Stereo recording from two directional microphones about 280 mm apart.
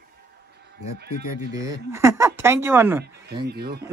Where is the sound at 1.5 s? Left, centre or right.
Centre.